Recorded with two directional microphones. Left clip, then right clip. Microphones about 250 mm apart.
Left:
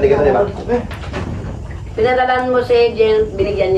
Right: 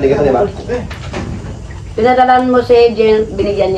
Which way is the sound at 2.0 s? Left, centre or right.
Centre.